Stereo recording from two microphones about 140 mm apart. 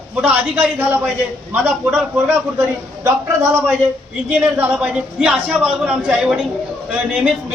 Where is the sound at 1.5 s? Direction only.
15° right (ahead or behind).